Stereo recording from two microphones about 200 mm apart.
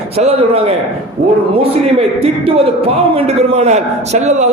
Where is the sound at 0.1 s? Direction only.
30° right (ahead or behind).